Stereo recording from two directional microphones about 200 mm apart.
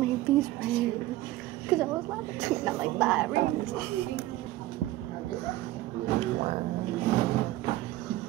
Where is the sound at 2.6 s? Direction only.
Centre (ahead or behind).